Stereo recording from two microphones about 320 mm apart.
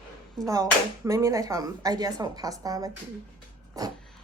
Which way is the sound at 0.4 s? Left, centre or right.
Centre.